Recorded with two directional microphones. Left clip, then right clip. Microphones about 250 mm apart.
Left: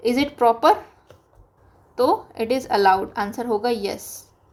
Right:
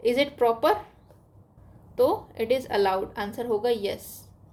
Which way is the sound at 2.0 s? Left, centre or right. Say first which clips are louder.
Left 3 dB; centre.